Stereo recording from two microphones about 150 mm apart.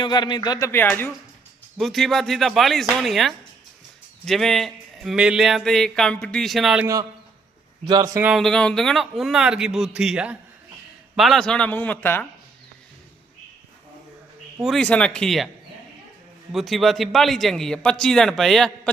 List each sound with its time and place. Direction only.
0.0 s speech: 30° left (ahead or behind)
0.7 s a man's voice: 15° left (ahead or behind)
1.8 s speech: centre (ahead or behind)
7.9 s speech: 25° right (ahead or behind)
8.2 s a man's voice: centre (ahead or behind)
14.6 s speech: 5° left (ahead or behind)
16.5 s speech: centre (ahead or behind)